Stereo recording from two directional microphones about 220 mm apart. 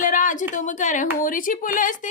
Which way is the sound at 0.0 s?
35° left (ahead or behind).